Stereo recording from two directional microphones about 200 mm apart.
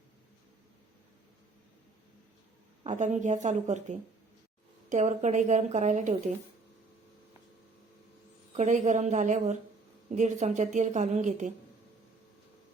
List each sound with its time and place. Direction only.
2.8 s a woman's voice: 35° right (ahead or behind)
8.5 s a woman's voice: 35° right (ahead or behind)